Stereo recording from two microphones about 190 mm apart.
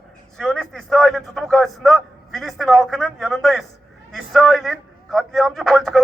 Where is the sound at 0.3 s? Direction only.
5° left (ahead or behind).